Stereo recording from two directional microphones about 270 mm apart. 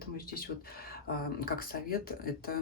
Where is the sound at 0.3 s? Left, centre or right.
Left.